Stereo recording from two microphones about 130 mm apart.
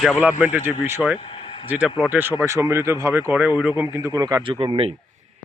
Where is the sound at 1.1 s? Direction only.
45° left (ahead or behind).